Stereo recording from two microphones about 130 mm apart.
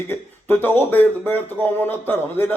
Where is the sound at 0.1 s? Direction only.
15° left (ahead or behind).